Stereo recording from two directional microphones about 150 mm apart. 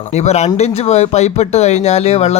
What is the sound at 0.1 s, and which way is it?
Speech, 50° left (ahead or behind).